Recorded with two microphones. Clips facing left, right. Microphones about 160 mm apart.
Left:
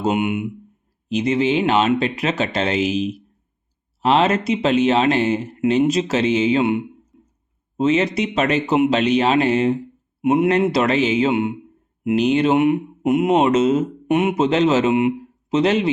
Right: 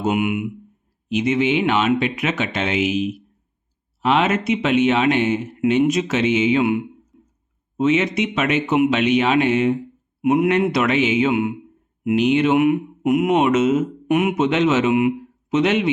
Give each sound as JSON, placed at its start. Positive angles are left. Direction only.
{"t": 0.0, "sound": "a man's voice", "side_deg": 30}
{"t": 4.0, "sound": "a man's voice", "side_deg": 35}
{"t": 12.0, "sound": "speech", "side_deg": 35}